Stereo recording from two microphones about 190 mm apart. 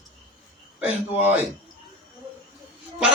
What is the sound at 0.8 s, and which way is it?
Speech, 5° right (ahead or behind).